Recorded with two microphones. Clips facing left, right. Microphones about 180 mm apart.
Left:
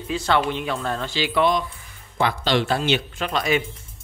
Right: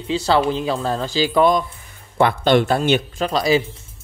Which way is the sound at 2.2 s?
55° right (ahead or behind).